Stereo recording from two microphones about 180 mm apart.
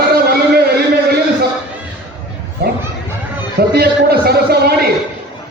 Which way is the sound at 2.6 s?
60° right (ahead or behind).